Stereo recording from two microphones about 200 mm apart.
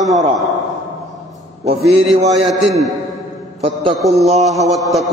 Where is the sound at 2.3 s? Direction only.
Centre (ahead or behind).